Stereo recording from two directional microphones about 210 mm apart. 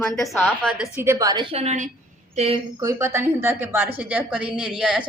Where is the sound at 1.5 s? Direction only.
35° right (ahead or behind).